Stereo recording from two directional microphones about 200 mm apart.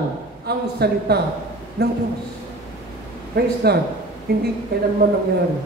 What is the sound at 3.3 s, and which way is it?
A man's voice, 55° right (ahead or behind).